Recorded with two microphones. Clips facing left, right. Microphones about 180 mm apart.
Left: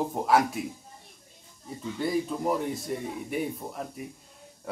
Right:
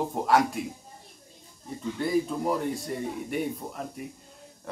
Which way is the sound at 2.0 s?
Centre (ahead or behind).